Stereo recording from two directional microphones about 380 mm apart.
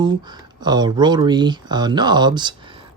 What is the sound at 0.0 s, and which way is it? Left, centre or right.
Speech, centre.